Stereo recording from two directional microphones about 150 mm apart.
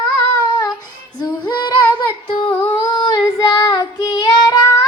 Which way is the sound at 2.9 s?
30° left (ahead or behind).